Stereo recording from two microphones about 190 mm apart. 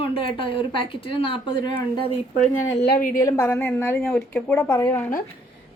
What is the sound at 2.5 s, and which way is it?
Speech, 90° left.